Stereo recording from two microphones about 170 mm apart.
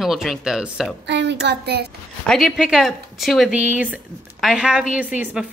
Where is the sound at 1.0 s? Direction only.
90° right.